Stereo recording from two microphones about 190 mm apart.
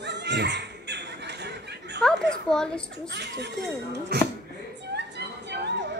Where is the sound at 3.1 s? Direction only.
65° right (ahead or behind).